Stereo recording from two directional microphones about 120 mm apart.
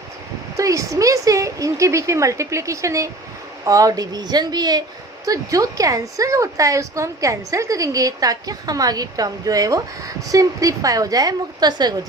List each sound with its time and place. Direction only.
0.5 s a woman's voice: 25° right (ahead or behind)